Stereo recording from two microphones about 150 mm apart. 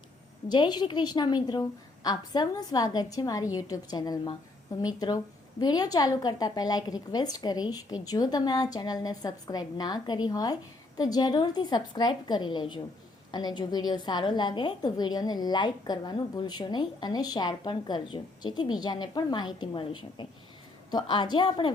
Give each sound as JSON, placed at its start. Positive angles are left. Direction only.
{"t": 0.4, "sound": "a woman's voice", "side_deg": 30}